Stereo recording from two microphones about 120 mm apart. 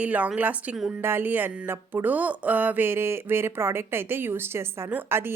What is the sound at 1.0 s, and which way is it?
Speech, 20° right (ahead or behind).